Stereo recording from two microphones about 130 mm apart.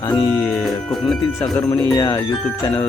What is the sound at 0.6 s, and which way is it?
Speech, centre (ahead or behind).